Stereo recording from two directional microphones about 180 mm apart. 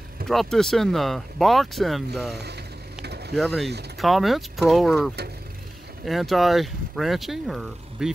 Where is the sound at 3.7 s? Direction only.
65° right (ahead or behind).